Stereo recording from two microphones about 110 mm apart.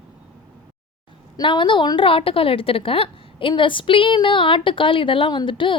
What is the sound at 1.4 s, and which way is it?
A woman's voice, 45° left (ahead or behind).